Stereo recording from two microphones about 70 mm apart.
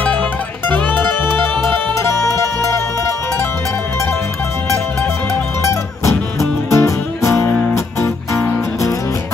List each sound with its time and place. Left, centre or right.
0.7 s music: left
1.4 s music: right
2.0 s music: left
5.6 s music: left